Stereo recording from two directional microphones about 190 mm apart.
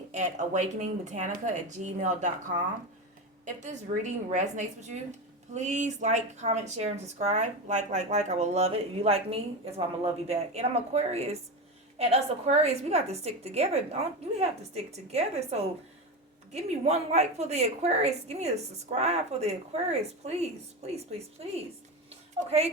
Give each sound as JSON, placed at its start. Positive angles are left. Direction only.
{"t": 0.1, "sound": "speech", "side_deg": -40}
{"t": 3.4, "sound": "speech", "side_deg": -40}
{"t": 22.4, "sound": "speech", "side_deg": -35}